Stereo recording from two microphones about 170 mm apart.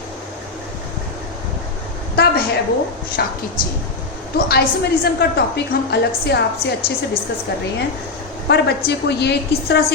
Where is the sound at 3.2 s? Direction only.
70° left (ahead or behind).